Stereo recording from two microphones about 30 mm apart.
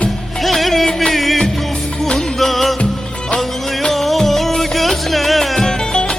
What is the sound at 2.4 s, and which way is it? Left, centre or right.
Music, centre.